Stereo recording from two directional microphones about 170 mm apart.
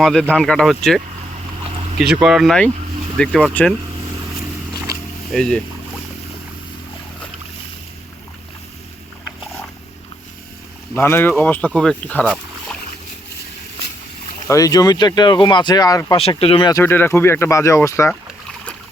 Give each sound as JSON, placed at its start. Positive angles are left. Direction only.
{"t": 0.0, "sound": "speech", "side_deg": 5}
{"t": 2.2, "sound": "speech", "side_deg": 0}
{"t": 5.3, "sound": "speech", "side_deg": 5}
{"t": 10.9, "sound": "speech", "side_deg": 15}
{"t": 14.4, "sound": "speech", "side_deg": 20}
{"t": 16.4, "sound": "speech", "side_deg": 35}
{"t": 16.7, "sound": "speech", "side_deg": 10}